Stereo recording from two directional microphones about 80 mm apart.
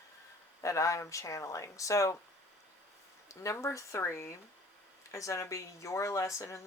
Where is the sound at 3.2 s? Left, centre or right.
Left.